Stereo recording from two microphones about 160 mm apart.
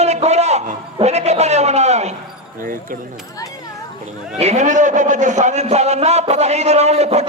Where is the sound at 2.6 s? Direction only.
60° right (ahead or behind).